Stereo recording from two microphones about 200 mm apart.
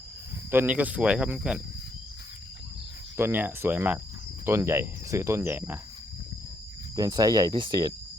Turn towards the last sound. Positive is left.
turn(degrees=-20)  # may be behind; listen again after turning